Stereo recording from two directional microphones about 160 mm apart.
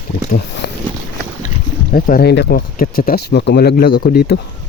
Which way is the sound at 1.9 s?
65° left (ahead or behind).